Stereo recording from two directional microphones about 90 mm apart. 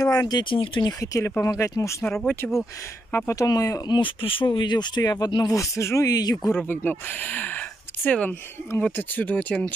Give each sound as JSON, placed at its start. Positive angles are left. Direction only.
{"t": 0.2, "sound": "speech", "side_deg": 55}
{"t": 0.8, "sound": "speech", "side_deg": 40}
{"t": 2.4, "sound": "speech", "side_deg": 15}
{"t": 3.3, "sound": "speech", "side_deg": 40}
{"t": 3.8, "sound": "speech", "side_deg": 65}
{"t": 6.5, "sound": "speech", "side_deg": 20}